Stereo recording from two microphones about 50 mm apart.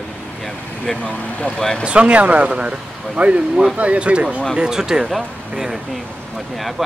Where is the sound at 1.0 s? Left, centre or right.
Left.